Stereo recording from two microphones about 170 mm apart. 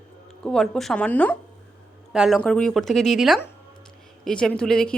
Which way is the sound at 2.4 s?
5° left (ahead or behind).